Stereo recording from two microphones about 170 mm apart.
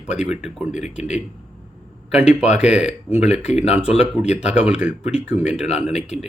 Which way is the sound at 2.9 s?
40° left (ahead or behind).